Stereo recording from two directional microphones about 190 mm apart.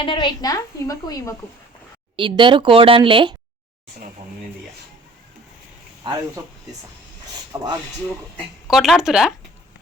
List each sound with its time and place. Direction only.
0.0 s a woman's voice: 25° left (ahead or behind)
2.1 s speech: 25° right (ahead or behind)
7.5 s speech: 15° right (ahead or behind)
8.7 s speech: centre (ahead or behind)